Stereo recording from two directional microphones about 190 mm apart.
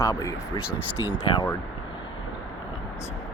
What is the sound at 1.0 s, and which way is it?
Speech, 25° left (ahead or behind).